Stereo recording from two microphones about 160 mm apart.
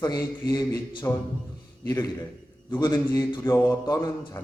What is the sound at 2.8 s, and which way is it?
A man's voice, 25° left (ahead or behind).